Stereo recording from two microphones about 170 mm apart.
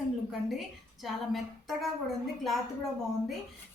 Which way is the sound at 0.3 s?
Centre (ahead or behind).